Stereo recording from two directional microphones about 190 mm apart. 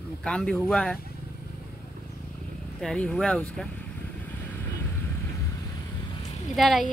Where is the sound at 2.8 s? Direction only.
5° left (ahead or behind).